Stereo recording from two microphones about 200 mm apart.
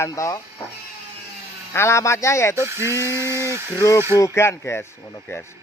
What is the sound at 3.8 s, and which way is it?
Speech, 15° left (ahead or behind).